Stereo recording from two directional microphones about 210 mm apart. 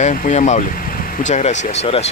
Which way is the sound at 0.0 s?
35° left (ahead or behind).